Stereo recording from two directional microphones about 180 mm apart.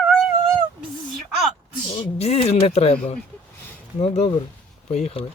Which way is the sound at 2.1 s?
35° left (ahead or behind).